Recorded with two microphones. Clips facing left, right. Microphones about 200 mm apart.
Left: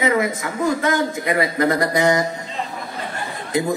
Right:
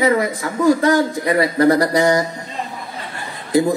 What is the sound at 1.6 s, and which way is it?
Speech, 35° right (ahead or behind).